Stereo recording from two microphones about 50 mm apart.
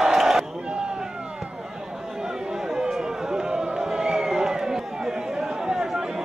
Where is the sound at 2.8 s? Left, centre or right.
Centre.